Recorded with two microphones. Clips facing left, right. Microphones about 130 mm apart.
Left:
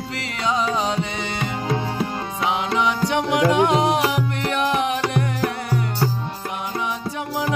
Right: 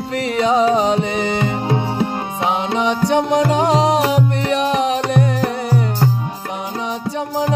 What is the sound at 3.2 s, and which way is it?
Music, 30° right (ahead or behind).